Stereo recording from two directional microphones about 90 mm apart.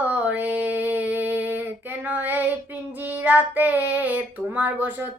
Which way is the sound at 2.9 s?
20° right (ahead or behind).